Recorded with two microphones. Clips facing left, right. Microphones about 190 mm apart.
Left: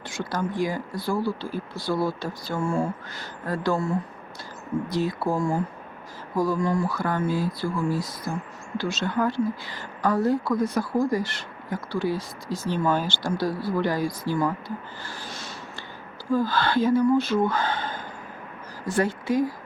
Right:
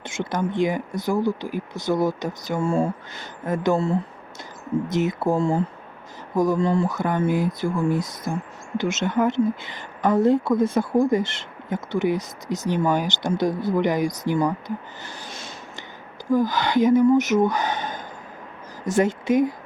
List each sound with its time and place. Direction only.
0.2 s speech: 20° right (ahead or behind)
16.3 s speech: 15° right (ahead or behind)